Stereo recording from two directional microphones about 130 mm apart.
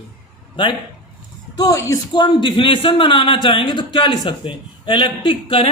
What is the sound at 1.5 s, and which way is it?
A man's voice, 25° left (ahead or behind).